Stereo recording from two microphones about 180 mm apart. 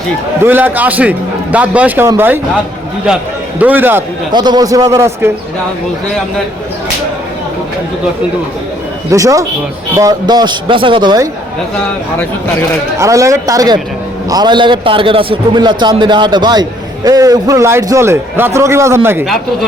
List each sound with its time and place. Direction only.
0.4 s a man's voice: 10° right (ahead or behind)
3.6 s a man's voice: 10° right (ahead or behind)
4.3 s a man's voice: 25° right (ahead or behind)
9.0 s a man's voice: 20° right (ahead or behind)
13.0 s a man's voice: 15° right (ahead or behind)